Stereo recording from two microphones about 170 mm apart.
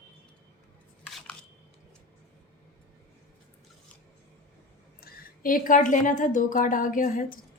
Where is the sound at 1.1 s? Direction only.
Centre (ahead or behind).